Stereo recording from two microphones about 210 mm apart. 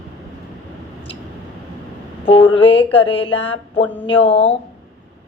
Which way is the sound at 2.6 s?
25° left (ahead or behind).